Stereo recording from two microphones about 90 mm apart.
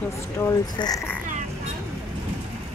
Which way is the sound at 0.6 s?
45° left (ahead or behind).